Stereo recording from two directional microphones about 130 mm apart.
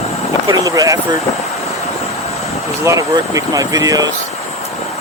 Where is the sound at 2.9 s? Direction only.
25° right (ahead or behind).